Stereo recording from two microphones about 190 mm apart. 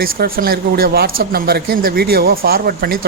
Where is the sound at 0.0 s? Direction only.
50° right (ahead or behind).